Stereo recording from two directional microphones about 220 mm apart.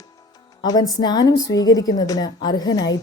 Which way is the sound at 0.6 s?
20° left (ahead or behind).